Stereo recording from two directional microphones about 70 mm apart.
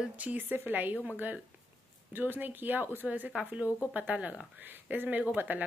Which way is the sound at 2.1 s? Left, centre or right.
Right.